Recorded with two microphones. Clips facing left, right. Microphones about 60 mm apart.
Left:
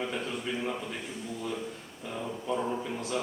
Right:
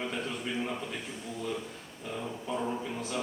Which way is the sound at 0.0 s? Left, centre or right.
Centre.